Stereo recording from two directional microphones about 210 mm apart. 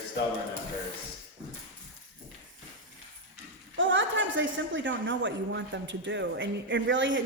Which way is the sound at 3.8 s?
65° right (ahead or behind).